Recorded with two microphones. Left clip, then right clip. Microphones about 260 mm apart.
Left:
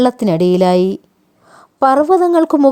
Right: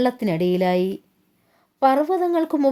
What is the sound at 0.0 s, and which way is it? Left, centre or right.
A woman's voice, left.